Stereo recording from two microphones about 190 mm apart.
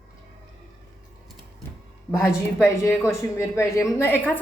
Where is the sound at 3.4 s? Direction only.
15° left (ahead or behind).